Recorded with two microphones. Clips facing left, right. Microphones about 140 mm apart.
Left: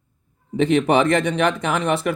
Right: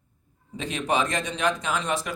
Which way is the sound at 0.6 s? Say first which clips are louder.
Left 9 dB; 60° left (ahead or behind).